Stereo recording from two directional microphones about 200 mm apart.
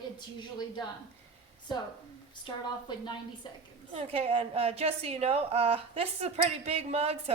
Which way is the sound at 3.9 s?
30° right (ahead or behind).